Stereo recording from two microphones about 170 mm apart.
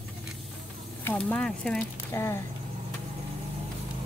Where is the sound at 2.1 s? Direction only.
15° left (ahead or behind).